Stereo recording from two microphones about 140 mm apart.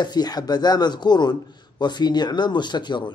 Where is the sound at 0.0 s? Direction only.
30° left (ahead or behind).